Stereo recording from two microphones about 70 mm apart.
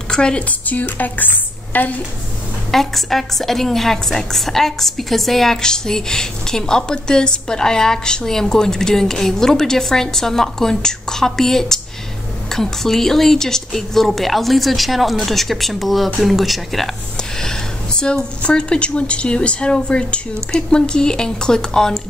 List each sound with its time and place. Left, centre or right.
0.1 s speech: centre
2.7 s a woman's voice: centre